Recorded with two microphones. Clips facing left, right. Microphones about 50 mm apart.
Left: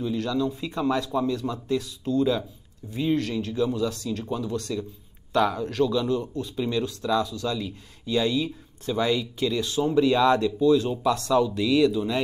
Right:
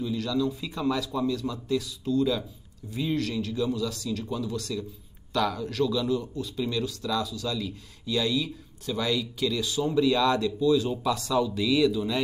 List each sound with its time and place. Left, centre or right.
0.0 s speech: centre
10.8 s speech: centre